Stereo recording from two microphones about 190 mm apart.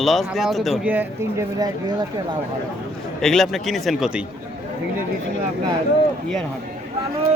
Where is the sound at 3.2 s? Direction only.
Centre (ahead or behind).